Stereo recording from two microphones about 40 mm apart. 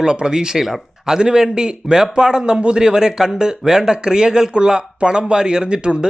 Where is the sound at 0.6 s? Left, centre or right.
Centre.